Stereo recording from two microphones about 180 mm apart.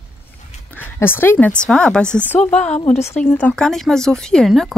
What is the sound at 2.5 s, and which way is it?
Speech, 40° left (ahead or behind).